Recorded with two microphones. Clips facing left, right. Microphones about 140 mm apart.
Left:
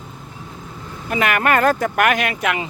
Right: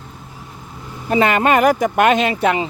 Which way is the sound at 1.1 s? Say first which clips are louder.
Right 4 dB; 25° right (ahead or behind).